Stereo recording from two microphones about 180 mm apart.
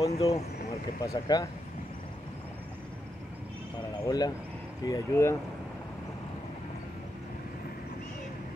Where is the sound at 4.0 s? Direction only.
20° left (ahead or behind).